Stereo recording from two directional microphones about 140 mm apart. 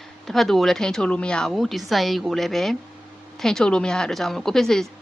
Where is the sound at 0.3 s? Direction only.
Centre (ahead or behind).